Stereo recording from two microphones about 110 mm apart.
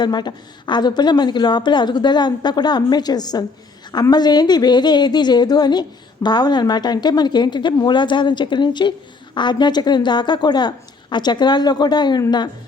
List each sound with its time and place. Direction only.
0.0 s a woman's voice: 40° left (ahead or behind)